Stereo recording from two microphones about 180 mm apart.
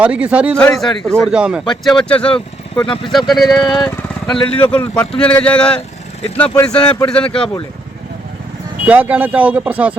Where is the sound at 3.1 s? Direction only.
Centre (ahead or behind).